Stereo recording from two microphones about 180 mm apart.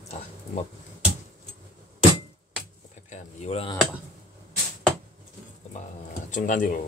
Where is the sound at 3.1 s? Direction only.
40° left (ahead or behind).